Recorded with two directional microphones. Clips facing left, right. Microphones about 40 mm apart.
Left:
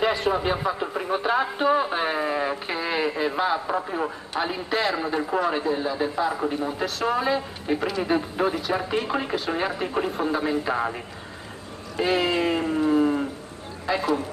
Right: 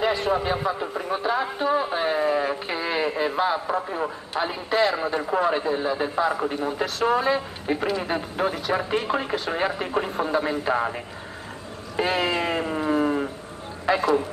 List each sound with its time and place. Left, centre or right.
0.0 s a man's voice: centre
12.0 s a sound: centre
13.9 s a man's voice: right